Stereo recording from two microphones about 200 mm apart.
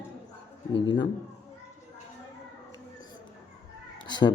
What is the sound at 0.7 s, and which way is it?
Speech, 20° left (ahead or behind).